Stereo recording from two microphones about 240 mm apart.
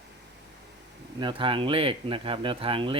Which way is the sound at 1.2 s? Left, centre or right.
Right.